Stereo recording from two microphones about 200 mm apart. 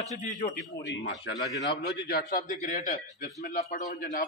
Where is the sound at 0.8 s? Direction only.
60° left (ahead or behind).